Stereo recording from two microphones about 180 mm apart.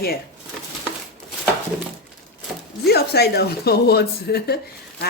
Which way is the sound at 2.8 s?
60° left (ahead or behind).